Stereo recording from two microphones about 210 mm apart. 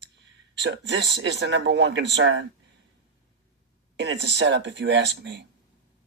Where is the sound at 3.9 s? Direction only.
55° right (ahead or behind).